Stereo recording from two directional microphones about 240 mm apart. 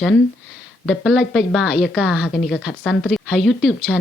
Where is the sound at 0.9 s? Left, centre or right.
Centre.